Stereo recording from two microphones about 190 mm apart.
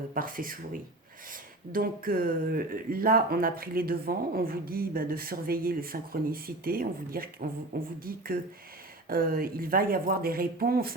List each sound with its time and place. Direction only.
0.1 s speech: 50° right (ahead or behind)